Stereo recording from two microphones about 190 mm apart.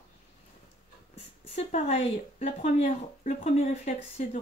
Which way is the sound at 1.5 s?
35° left (ahead or behind).